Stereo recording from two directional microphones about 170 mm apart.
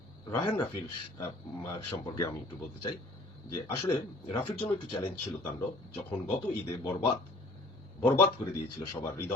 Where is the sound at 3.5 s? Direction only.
30° left (ahead or behind).